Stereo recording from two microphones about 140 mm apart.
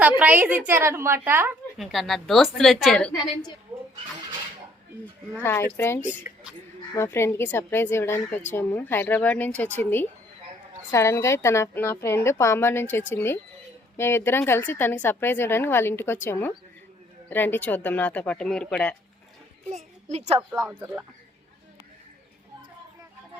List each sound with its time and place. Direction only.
0.2 s a woman's voice: 10° right (ahead or behind)
1.8 s a woman's voice: centre (ahead or behind)
5.4 s a woman's voice: 15° left (ahead or behind)
6.0 s speech: 10° right (ahead or behind)
6.9 s a woman's voice: 20° left (ahead or behind)
19.7 s a child's voice: 55° right (ahead or behind)
20.5 s a woman's voice: 5° right (ahead or behind)